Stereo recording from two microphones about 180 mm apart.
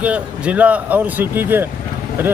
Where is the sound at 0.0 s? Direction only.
10° right (ahead or behind).